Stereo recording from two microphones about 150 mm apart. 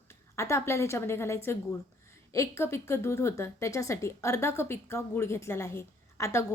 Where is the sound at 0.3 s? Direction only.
20° left (ahead or behind).